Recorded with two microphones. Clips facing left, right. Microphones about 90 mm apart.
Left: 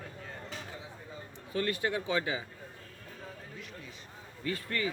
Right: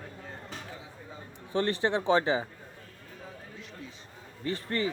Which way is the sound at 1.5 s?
30° right (ahead or behind).